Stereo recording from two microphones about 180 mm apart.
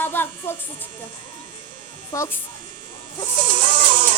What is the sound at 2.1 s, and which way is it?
Speech, 15° left (ahead or behind).